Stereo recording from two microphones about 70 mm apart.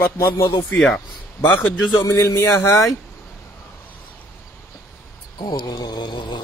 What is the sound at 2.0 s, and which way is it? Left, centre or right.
Speech, left.